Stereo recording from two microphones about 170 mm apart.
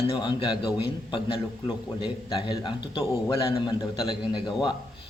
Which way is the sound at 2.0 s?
30° left (ahead or behind).